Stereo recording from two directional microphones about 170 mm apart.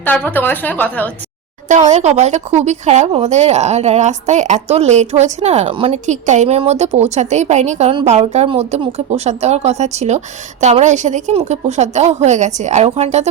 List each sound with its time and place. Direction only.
0.0 s a woman's voice: 10° left (ahead or behind)
1.6 s a woman's voice: 45° right (ahead or behind)
6.1 s a woman's voice: 45° right (ahead or behind)